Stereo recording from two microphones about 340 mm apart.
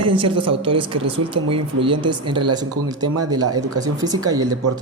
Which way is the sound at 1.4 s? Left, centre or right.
Right.